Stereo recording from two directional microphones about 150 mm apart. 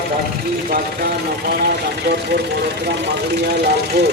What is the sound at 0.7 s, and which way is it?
Speech, 90° right.